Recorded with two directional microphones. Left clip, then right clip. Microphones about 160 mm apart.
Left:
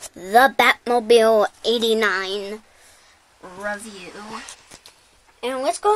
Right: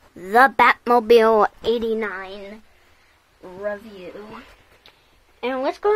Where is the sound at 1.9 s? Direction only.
55° left (ahead or behind).